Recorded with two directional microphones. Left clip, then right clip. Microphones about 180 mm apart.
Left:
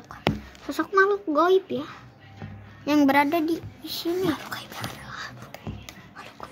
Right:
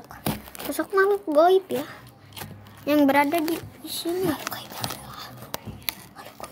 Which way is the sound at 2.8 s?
40° left (ahead or behind).